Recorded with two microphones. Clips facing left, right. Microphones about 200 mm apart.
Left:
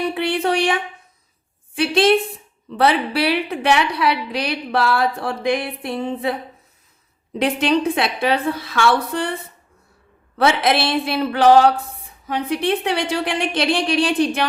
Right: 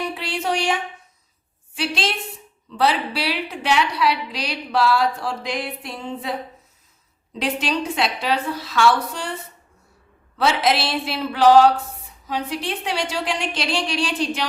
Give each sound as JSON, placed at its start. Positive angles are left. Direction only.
{"t": 0.1, "sound": "a sound", "side_deg": 55}
{"t": 1.7, "sound": "a woman's voice", "side_deg": 55}
{"t": 7.3, "sound": "a woman's voice", "side_deg": 55}
{"t": 10.3, "sound": "a woman's voice", "side_deg": 55}